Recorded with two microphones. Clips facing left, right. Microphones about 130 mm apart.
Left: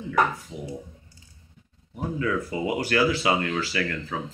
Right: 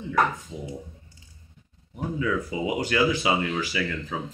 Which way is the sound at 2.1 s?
10° right (ahead or behind).